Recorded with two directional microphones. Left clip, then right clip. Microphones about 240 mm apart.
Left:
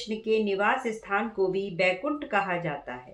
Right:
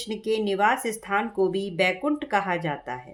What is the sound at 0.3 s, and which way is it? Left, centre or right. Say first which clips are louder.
Speech: right 2 dB; right.